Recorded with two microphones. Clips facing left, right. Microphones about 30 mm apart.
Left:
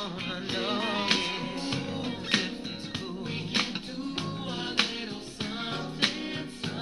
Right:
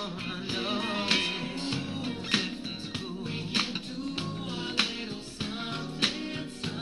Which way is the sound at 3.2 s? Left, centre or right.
Left.